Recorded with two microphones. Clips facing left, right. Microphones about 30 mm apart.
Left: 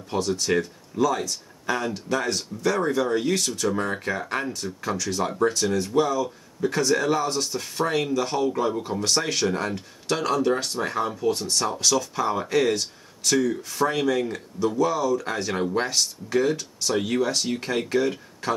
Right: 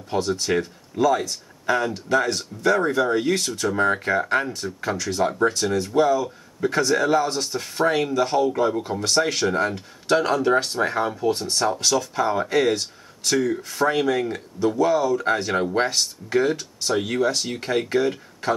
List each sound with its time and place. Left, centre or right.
0.3 s speech: centre
0.6 s speech: centre
16.9 s speech: centre